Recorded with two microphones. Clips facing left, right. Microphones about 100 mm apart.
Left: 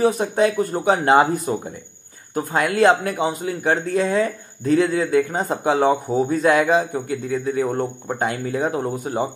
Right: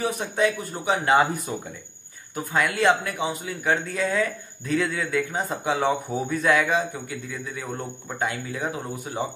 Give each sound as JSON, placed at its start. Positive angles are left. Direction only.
{"t": 0.0, "sound": "a man's voice", "side_deg": 40}